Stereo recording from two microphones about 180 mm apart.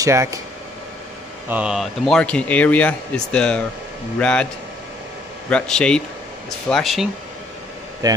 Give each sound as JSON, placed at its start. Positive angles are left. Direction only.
{"t": 0.0, "sound": "speech", "side_deg": -15}
{"t": 1.5, "sound": "a man's voice", "side_deg": -5}
{"t": 5.5, "sound": "speech", "side_deg": 5}
{"t": 8.0, "sound": "speech", "side_deg": -20}